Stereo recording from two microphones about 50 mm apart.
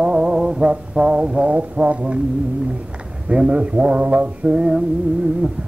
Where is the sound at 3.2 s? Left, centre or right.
Right.